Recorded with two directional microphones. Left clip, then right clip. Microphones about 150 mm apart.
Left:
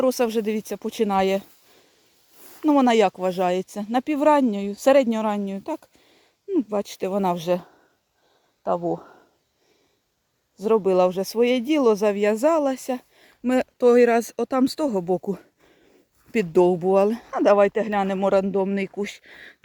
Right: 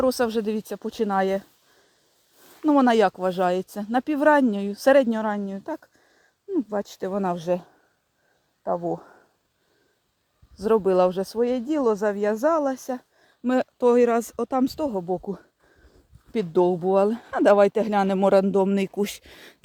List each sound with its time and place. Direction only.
0.0 s speech: 10° left (ahead or behind)
2.6 s speech: 5° left (ahead or behind); by 9.2 s 25° left (ahead or behind)
10.6 s speech: centre (ahead or behind)
11.6 s speech: 25° left (ahead or behind); by 17.4 s centre (ahead or behind)
17.4 s speech: 15° right (ahead or behind)